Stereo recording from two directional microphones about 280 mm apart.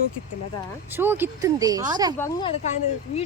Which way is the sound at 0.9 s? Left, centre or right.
Centre.